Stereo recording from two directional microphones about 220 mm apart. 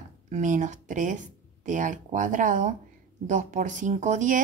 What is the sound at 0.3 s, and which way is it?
A woman's voice, 35° right (ahead or behind).